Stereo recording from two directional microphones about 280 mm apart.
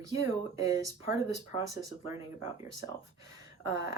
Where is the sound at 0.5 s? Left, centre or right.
Centre.